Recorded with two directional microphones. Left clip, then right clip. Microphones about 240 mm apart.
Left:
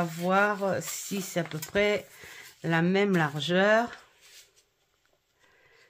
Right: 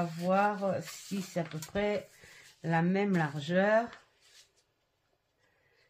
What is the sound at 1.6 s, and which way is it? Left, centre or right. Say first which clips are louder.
Speech: left 7 dB; left.